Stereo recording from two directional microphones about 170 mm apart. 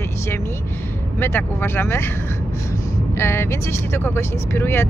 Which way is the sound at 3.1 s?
15° left (ahead or behind).